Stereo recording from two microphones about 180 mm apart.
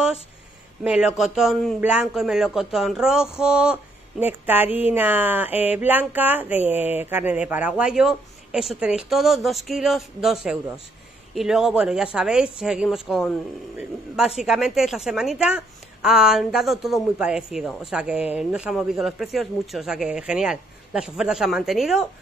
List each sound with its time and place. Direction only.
0.8 s speech: 5° right (ahead or behind)